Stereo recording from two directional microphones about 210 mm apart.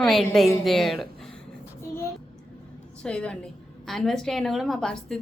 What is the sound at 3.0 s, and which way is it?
A woman's voice, 5° left (ahead or behind).